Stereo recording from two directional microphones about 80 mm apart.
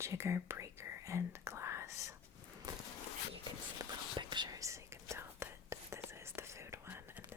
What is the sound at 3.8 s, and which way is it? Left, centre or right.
Whispering, right.